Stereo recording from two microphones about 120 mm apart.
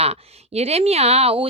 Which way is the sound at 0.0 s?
60° right (ahead or behind).